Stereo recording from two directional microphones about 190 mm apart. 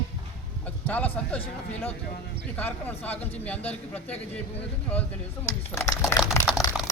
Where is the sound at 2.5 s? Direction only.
10° left (ahead or behind).